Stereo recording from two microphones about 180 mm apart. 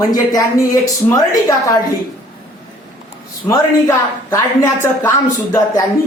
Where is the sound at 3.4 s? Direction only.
15° left (ahead or behind).